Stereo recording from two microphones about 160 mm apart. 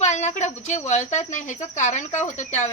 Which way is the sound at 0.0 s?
45° left (ahead or behind).